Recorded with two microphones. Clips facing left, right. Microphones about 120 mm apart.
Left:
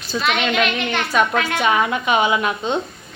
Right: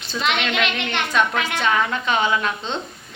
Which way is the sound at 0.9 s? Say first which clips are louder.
Left 2 dB; 10° left (ahead or behind).